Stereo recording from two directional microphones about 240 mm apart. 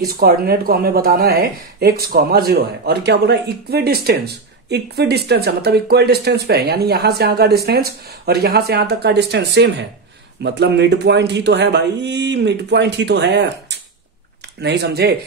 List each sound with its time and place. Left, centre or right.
0.0 s speech: right